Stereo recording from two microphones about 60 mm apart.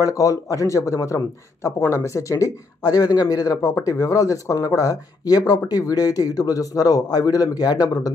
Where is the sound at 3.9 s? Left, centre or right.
Left.